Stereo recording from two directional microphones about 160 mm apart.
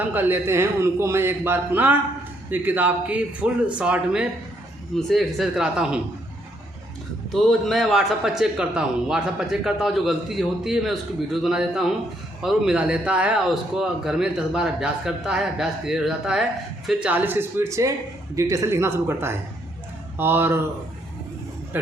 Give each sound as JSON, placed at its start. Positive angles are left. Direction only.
{"t": 0.0, "sound": "a man's voice", "side_deg": -10}
{"t": 7.3, "sound": "a man's voice", "side_deg": 0}